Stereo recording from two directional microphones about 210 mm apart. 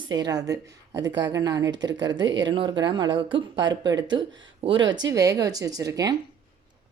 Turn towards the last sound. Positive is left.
turn(degrees=-15)  # may be behind; listen again after turning